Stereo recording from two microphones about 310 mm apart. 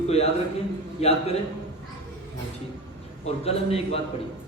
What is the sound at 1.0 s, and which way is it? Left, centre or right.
Speech, centre.